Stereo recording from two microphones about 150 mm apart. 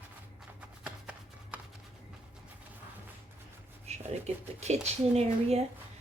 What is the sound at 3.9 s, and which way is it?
Speech, 50° right (ahead or behind).